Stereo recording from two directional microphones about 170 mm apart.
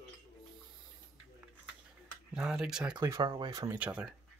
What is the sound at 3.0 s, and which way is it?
Speech, 20° right (ahead or behind).